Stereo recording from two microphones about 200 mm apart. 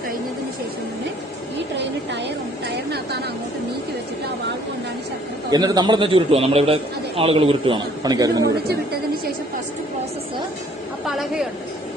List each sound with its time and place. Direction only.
2.6 s a sound: 55° right (ahead or behind)
5.5 s a man's voice: 20° right (ahead or behind)
11.0 s a woman's voice: centre (ahead or behind)